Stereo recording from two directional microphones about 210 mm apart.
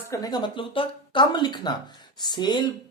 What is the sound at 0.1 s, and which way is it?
Speech, 20° left (ahead or behind).